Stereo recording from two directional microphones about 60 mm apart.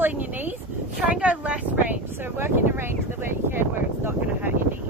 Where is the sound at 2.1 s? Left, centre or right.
Right.